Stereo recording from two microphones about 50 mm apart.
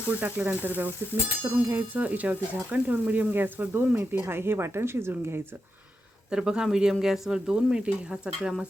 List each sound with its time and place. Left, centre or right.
0.1 s speech: right
1.7 s speech: right
6.3 s speech: centre